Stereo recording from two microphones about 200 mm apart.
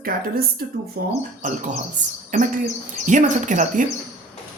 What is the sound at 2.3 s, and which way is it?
Speech, 40° right (ahead or behind).